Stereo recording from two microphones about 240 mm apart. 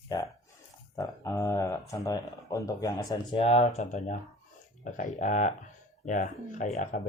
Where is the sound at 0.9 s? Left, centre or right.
Centre.